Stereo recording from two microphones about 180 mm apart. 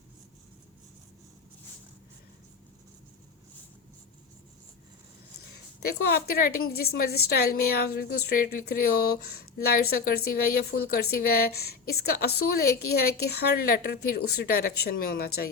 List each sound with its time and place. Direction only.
6.1 s a woman's voice: 60° left (ahead or behind)